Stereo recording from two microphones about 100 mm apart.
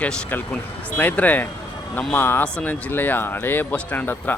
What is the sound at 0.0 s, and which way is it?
Speech, 15° left (ahead or behind).